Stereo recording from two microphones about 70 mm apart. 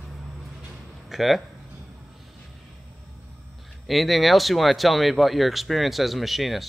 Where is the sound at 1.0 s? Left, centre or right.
Centre.